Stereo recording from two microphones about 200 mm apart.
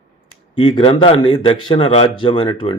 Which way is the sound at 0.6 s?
25° left (ahead or behind).